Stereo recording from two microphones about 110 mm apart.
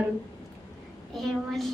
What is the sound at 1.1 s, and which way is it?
Speech, centre (ahead or behind).